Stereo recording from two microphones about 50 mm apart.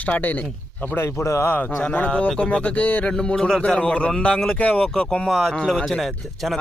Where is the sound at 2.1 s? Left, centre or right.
Left.